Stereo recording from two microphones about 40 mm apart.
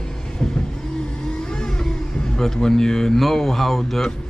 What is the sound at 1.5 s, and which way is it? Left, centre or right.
Vehicle, centre.